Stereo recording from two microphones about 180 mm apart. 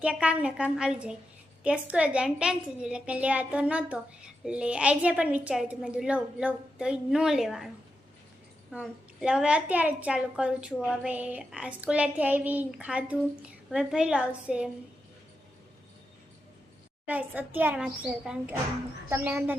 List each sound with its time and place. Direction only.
0.0 s a woman's voice: 5° right (ahead or behind)
8.7 s a woman's voice: 5° right (ahead or behind)
17.1 s a woman's voice: 10° right (ahead or behind)